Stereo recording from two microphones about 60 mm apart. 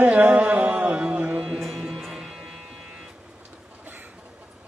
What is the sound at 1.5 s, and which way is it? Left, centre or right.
Music, centre.